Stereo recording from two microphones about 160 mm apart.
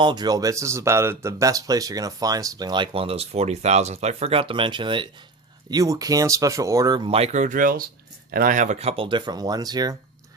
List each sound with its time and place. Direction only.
0.0 s speech: 25° right (ahead or behind)